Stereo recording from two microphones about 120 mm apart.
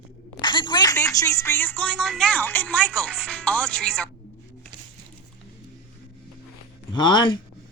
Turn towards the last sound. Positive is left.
turn(degrees=40)  # may be behind; listen again after turning